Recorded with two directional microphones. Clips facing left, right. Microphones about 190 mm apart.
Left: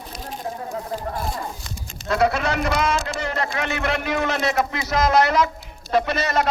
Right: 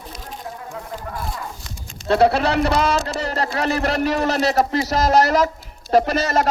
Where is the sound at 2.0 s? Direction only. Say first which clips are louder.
Right 4 dB; 30° right (ahead or behind).